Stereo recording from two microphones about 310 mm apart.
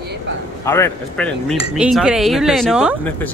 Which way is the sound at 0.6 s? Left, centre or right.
Centre.